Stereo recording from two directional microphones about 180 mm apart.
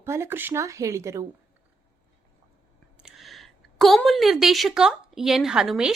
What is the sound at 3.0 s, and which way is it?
A woman's voice, centre (ahead or behind).